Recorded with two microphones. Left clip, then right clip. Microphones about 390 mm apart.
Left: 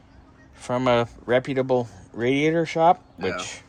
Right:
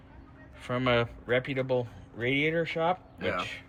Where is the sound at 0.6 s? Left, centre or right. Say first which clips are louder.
Left 6 dB; centre.